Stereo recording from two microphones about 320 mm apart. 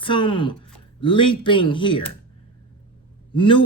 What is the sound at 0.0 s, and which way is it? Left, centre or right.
Speech, centre.